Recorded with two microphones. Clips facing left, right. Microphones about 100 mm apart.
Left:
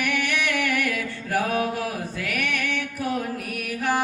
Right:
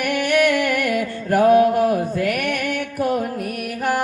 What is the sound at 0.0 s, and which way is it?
Music, 50° right (ahead or behind).